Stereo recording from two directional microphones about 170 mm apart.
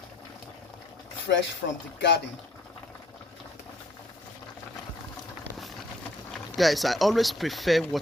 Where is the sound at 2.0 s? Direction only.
90° left.